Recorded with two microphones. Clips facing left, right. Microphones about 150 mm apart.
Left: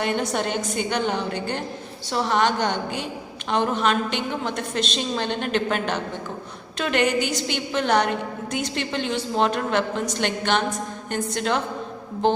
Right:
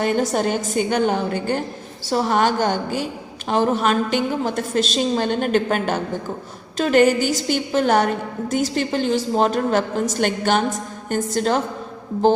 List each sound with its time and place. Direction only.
0.0 s a woman's voice: 45° right (ahead or behind)